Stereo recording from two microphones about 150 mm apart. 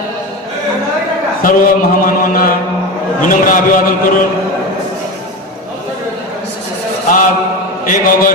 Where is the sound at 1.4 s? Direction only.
65° left (ahead or behind).